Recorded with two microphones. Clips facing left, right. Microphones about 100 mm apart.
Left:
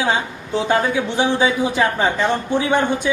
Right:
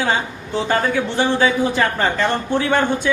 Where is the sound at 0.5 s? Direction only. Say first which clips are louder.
Left 1 dB; 10° left (ahead or behind).